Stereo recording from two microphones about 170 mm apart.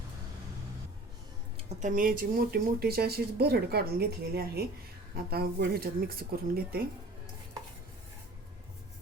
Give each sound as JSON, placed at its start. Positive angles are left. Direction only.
{"t": 1.5, "sound": "speech", "side_deg": -45}